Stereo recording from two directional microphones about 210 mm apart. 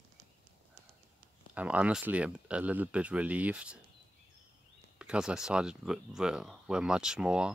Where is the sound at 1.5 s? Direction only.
5° right (ahead or behind).